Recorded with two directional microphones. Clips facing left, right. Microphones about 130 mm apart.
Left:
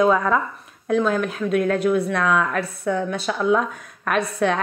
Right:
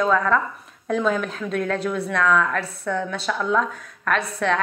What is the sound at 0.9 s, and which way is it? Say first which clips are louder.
Speech: left 2 dB; centre (ahead or behind).